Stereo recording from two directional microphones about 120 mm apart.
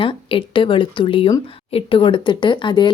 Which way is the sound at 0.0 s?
45° left (ahead or behind).